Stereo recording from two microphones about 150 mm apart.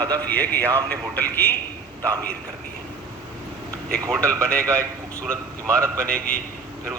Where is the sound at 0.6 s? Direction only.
25° right (ahead or behind).